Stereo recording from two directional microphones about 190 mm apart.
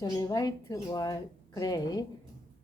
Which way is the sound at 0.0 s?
20° left (ahead or behind).